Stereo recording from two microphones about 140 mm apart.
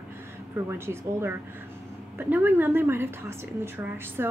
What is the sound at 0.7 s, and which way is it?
A woman's voice, 15° right (ahead or behind).